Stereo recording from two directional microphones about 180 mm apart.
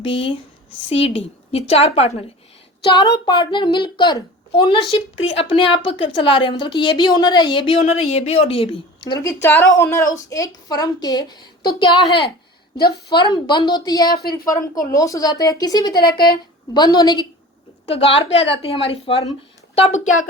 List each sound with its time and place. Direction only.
0.0 s a woman's voice: 30° left (ahead or behind)
14.2 s a woman's voice: 60° left (ahead or behind)
14.4 s speech: 20° left (ahead or behind)
16.0 s a woman's voice: 60° left (ahead or behind)
16.7 s a woman's voice: 20° left (ahead or behind)